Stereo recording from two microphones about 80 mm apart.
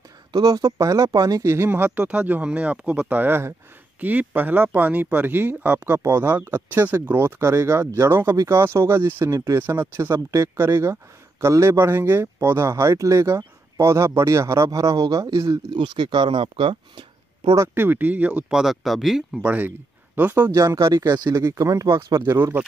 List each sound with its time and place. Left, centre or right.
0.3 s speech: right
1.7 s speech: right
15.7 s speech: right
17.7 s speech: right
18.6 s speech: centre
19.4 s speech: centre
20.5 s speech: right
21.1 s speech: right
22.1 s speech: right